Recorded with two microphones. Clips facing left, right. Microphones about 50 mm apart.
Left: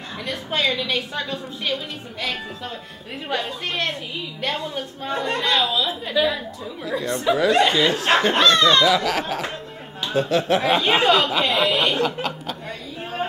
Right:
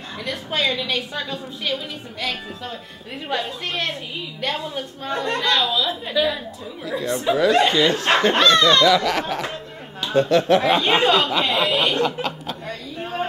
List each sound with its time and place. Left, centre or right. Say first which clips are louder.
0.2 s speech: even; centre
3.3 s speech: even; centre